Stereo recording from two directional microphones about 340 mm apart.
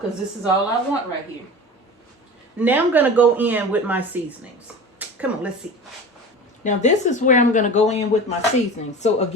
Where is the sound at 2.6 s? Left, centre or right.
Centre.